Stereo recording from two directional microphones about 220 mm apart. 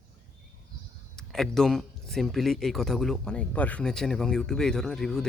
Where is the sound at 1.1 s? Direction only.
Centre (ahead or behind).